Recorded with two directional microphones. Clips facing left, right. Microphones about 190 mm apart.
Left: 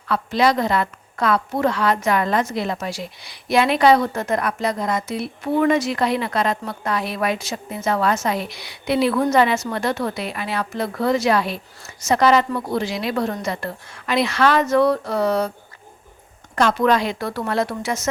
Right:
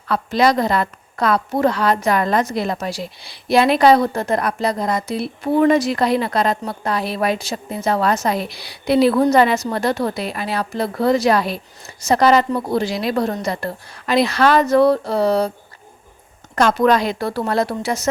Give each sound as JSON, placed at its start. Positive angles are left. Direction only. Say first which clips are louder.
{"t": 0.1, "sound": "a woman's voice", "louder": "right 2 dB", "side_deg": -40}
{"t": 16.6, "sound": "a woman's voice", "louder": "right 2 dB", "side_deg": -40}